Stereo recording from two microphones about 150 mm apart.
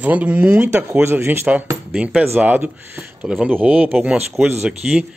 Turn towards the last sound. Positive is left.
turn(degrees=-5)  # may be behind; listen again after turning